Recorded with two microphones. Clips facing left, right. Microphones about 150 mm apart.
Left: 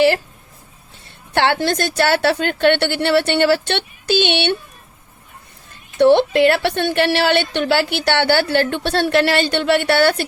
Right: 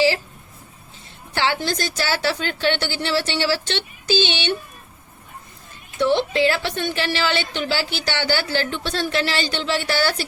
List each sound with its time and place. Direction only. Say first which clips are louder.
1.3 s a woman's voice: left 6 dB; 60° left (ahead or behind)
6.0 s a woman's voice: left 7 dB; 65° left (ahead or behind)